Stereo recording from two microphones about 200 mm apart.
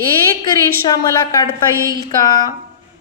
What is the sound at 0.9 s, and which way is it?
A woman's voice, 20° left (ahead or behind).